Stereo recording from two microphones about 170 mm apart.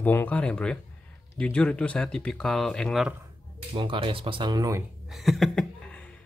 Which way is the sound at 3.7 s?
30° right (ahead or behind).